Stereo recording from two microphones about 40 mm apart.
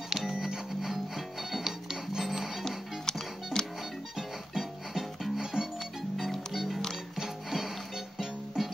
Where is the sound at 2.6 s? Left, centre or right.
Centre.